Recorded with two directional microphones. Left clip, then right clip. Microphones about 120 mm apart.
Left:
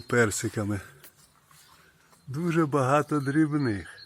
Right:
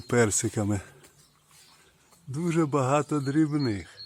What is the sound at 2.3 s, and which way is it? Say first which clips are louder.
A man's voice: left 1 dB; 15° right (ahead or behind).